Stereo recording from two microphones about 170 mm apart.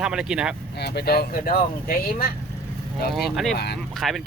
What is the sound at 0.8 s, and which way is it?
Speech, 75° left (ahead or behind).